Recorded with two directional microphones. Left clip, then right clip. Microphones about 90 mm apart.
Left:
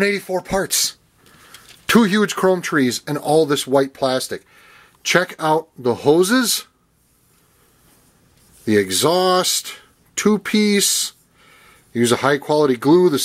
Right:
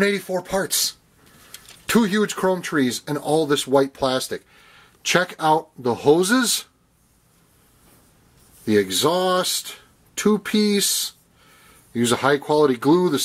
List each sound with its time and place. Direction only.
0.4 s speech: 35° left (ahead or behind)
8.6 s speech: 30° left (ahead or behind)